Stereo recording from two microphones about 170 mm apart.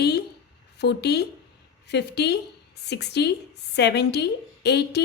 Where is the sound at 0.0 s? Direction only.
75° left (ahead or behind).